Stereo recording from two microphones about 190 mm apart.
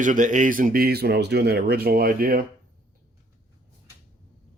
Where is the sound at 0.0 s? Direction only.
45° right (ahead or behind).